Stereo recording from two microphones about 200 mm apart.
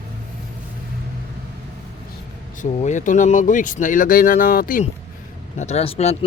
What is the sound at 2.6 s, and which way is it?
Speech, 35° left (ahead or behind).